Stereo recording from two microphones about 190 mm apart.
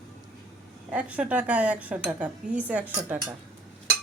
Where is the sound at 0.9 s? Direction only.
5° right (ahead or behind).